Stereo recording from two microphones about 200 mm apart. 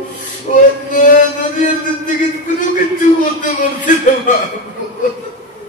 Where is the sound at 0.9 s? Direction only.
40° left (ahead or behind).